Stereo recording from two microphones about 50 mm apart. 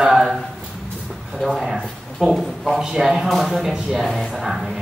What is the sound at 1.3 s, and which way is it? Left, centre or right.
Speech, centre.